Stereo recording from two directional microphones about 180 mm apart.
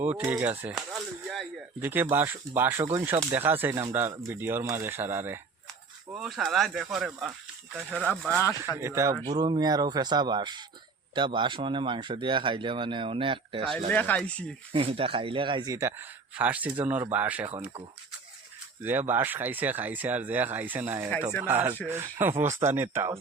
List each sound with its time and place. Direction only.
0.2 s speech: 10° right (ahead or behind)
1.8 s speech: 10° right (ahead or behind)
6.1 s speech: centre (ahead or behind)
8.8 s speech: 15° right (ahead or behind)
13.7 s speech: 5° left (ahead or behind)
14.7 s speech: 30° right (ahead or behind); by 17.5 s 10° right (ahead or behind)
18.8 s speech: 10° right (ahead or behind)